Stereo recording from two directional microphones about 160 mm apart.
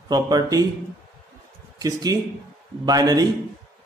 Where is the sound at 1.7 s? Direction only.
20° right (ahead or behind).